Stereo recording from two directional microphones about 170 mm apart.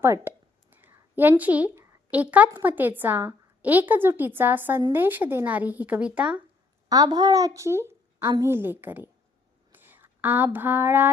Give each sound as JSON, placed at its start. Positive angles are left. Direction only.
{"t": 0.0, "sound": "a sound", "side_deg": -15}
{"t": 2.6, "sound": "a woman's voice", "side_deg": -10}
{"t": 6.8, "sound": "a woman's voice", "side_deg": -20}